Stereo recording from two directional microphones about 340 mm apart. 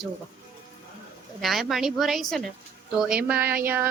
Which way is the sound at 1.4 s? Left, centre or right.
Centre.